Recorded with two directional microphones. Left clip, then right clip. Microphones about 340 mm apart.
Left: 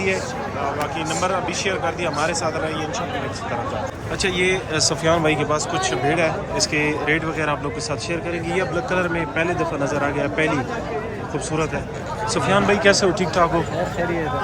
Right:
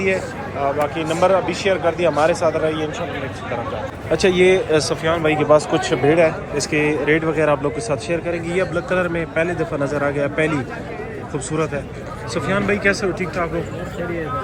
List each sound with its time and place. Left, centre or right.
0.9 s speech: left
1.6 s a man's voice: centre
4.1 s a man's voice: centre
5.5 s a man's voice: centre
6.7 s speech: left
7.1 s a man's voice: centre
12.3 s speech: centre